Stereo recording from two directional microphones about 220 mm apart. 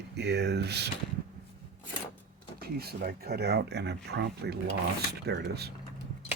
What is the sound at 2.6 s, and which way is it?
Speech, 45° right (ahead or behind).